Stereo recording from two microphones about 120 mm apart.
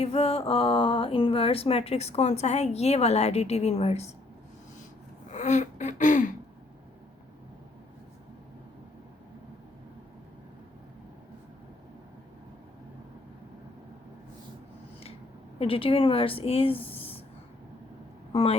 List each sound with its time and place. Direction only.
0.0 s speech: 55° left (ahead or behind)
5.3 s a sound: 80° left
15.5 s a woman's voice: 50° left (ahead or behind)
16.7 s speech: 15° left (ahead or behind)
18.3 s speech: 55° left (ahead or behind)